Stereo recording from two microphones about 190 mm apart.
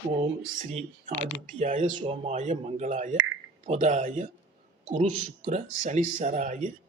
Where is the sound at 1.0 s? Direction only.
40° right (ahead or behind).